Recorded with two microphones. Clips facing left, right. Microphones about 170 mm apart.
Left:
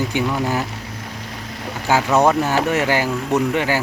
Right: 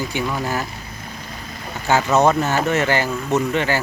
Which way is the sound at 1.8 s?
10° left (ahead or behind).